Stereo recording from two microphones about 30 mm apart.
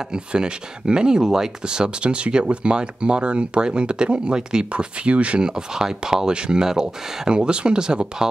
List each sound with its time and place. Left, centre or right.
0.1 s speech: right
1.7 s speech: right
4.7 s speech: right
5.4 s speech: right